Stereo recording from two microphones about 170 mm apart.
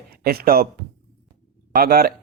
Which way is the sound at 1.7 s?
60° right (ahead or behind).